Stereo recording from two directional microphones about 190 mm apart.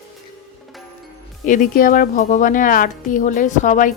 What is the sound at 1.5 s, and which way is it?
A woman's voice, 45° left (ahead or behind).